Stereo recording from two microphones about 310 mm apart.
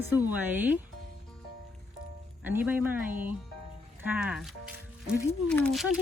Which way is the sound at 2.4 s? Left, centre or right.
Centre.